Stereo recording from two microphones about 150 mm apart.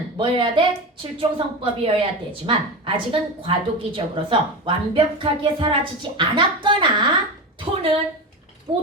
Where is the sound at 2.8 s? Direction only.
35° right (ahead or behind).